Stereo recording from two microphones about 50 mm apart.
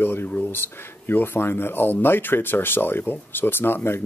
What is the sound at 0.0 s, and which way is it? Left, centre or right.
Speech, left.